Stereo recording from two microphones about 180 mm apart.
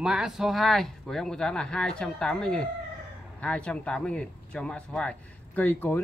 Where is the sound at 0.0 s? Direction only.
5° right (ahead or behind).